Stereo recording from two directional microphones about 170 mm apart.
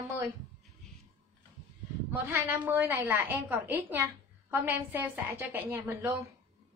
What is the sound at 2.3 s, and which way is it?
A woman's voice, 10° right (ahead or behind).